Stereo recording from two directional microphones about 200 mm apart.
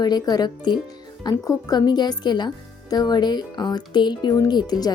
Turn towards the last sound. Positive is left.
turn(degrees=20)  # may be behind; listen again after turning